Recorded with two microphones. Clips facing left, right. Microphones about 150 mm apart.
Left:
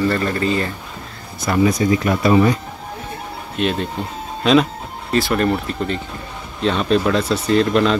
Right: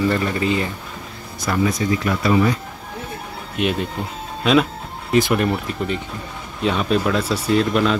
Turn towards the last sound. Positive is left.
turn(degrees=-5)  # may be behind; listen again after turning